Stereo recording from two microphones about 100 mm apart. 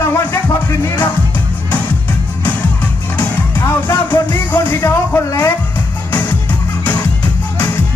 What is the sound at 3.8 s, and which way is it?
Music, 15° left (ahead or behind).